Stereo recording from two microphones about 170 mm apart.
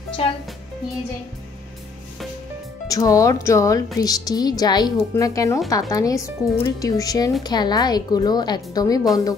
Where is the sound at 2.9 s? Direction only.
20° left (ahead or behind).